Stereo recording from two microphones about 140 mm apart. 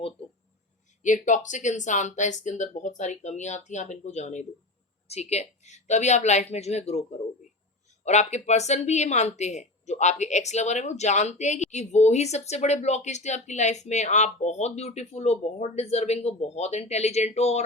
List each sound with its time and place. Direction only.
1.0 s speech: 65° left (ahead or behind)
8.0 s speech: 55° left (ahead or behind)